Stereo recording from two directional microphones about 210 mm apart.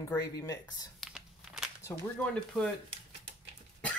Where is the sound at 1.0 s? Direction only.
Centre (ahead or behind).